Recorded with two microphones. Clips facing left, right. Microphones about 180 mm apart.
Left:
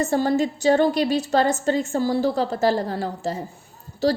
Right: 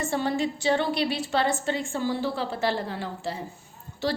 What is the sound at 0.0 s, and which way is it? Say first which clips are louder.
A woman's voice: left 6 dB; 40° left (ahead or behind).